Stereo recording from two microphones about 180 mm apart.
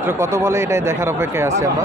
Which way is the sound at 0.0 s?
15° right (ahead or behind).